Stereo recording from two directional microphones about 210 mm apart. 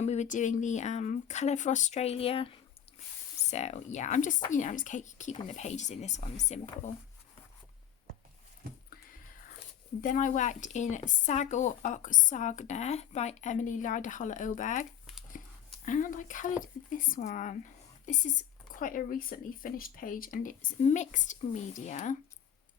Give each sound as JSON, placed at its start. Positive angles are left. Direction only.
{"t": 0.0, "sound": "speech", "side_deg": 30}
{"t": 10.0, "sound": "speech", "side_deg": 40}
{"t": 15.9, "sound": "speech", "side_deg": 40}